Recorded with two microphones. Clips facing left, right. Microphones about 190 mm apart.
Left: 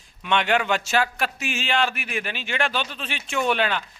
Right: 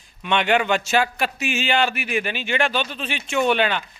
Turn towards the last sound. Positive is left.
turn(degrees=0)  # may be behind; listen again after turning